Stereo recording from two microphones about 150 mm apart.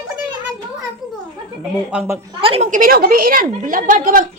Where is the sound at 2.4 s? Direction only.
40° right (ahead or behind).